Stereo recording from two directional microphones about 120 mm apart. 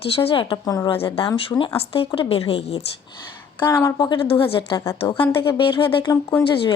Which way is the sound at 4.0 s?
45° left (ahead or behind).